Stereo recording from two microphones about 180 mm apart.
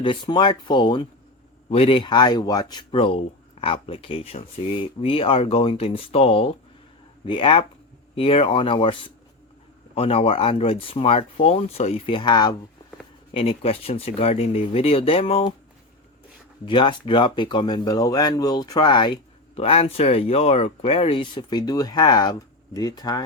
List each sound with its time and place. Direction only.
0.0 s speech: 25° left (ahead or behind)
16.6 s speech: 25° left (ahead or behind)